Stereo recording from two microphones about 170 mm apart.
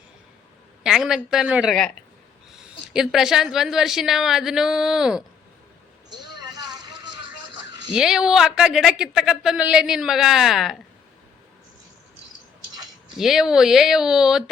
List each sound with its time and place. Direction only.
0.9 s a woman's voice: 5° right (ahead or behind)
6.4 s vehicle: 25° right (ahead or behind)
7.9 s a woman's voice: 5° right (ahead or behind)
13.1 s a woman's voice: centre (ahead or behind)